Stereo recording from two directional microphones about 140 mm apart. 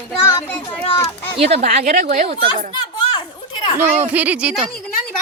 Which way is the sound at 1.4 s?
45° right (ahead or behind).